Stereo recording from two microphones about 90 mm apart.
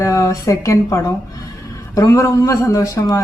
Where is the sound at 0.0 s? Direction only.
35° left (ahead or behind).